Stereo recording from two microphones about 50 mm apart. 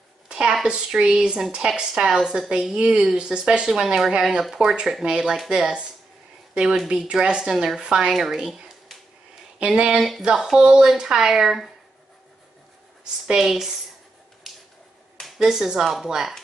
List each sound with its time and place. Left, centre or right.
0.3 s a sound: centre
0.7 s speech: centre
9.6 s speech: right; by 11.7 s centre
13.3 s speech: centre
15.3 s speech: centre